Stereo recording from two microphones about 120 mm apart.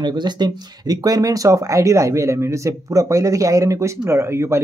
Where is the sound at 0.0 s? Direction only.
35° right (ahead or behind).